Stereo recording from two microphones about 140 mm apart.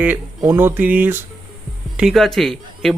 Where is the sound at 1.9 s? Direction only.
Centre (ahead or behind).